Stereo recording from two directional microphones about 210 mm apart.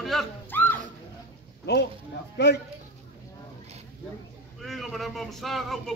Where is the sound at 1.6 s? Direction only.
55° left (ahead or behind).